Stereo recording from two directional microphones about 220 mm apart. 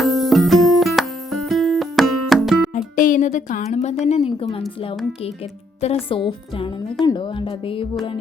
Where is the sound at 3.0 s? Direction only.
35° left (ahead or behind).